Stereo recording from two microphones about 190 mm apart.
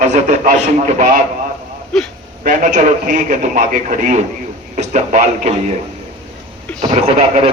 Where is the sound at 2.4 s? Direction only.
40° right (ahead or behind).